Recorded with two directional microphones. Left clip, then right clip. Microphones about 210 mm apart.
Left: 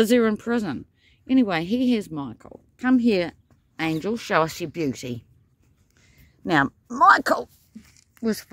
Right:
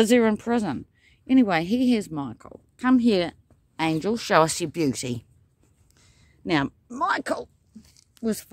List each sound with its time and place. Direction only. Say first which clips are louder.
0.0 s a woman's voice: even; centre (ahead or behind)
5.9 s a sound: left 2 dB; centre (ahead or behind)
7.0 s speech: left 9 dB; 20° left (ahead or behind)
7.9 s zipper: left 2 dB; 15° left (ahead or behind)